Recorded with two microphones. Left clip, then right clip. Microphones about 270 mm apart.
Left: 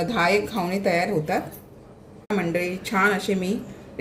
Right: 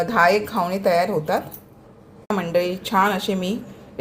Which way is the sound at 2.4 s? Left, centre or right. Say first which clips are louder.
Right 5 dB; right.